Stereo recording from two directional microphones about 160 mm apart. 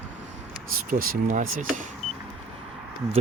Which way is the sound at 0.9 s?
60° right (ahead or behind).